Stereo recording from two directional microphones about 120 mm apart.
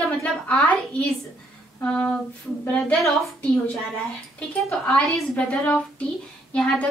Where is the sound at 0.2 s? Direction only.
10° left (ahead or behind).